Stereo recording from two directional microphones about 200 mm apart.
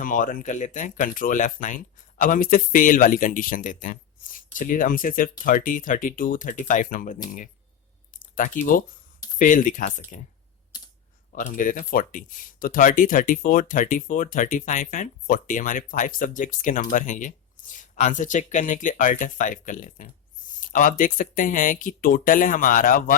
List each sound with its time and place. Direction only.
0.0 s speech: 40° left (ahead or behind)
8.1 s a sound: 40° left (ahead or behind)
9.4 s speech: 40° left (ahead or behind)
11.3 s speech: 40° left (ahead or behind)